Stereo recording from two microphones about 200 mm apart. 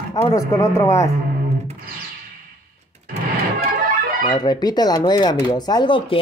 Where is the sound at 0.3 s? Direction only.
15° left (ahead or behind).